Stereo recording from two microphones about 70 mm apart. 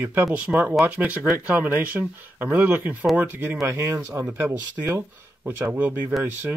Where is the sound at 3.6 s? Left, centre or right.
Right.